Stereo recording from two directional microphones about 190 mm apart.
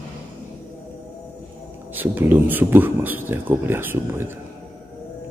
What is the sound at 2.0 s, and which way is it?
Speech, 10° right (ahead or behind).